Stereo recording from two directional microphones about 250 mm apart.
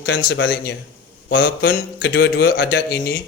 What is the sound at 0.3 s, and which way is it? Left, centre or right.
Speech, left.